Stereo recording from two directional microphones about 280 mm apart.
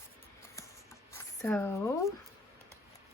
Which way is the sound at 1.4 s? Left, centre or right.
Centre.